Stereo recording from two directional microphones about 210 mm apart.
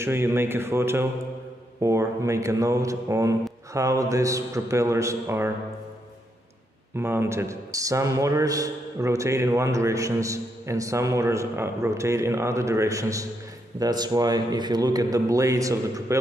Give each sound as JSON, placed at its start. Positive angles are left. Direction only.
{"t": 0.0, "sound": "a man's voice", "side_deg": -10}
{"t": 7.0, "sound": "a man's voice", "side_deg": -10}